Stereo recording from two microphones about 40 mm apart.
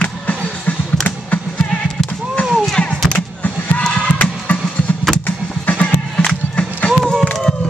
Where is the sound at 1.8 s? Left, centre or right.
Left.